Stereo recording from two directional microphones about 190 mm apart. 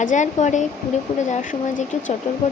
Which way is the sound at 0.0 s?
40° left (ahead or behind).